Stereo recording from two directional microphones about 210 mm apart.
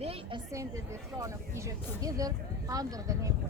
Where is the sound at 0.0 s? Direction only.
25° right (ahead or behind).